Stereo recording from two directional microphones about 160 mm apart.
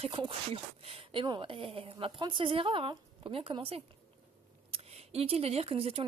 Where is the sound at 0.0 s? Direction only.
35° right (ahead or behind).